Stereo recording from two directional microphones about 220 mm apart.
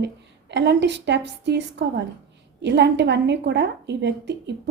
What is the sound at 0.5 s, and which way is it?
A woman's voice, 50° right (ahead or behind).